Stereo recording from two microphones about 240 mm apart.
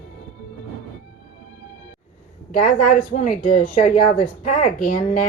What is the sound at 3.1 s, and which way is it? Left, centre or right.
Speech, left.